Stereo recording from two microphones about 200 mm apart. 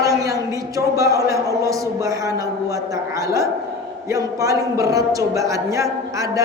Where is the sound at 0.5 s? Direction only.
15° right (ahead or behind).